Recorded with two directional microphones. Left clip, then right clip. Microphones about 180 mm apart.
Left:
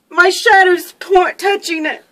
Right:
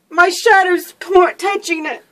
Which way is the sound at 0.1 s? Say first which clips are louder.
Left 1 dB; 35° left (ahead or behind).